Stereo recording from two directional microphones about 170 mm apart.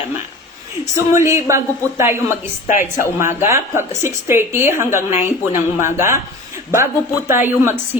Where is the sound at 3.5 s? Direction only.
15° right (ahead or behind).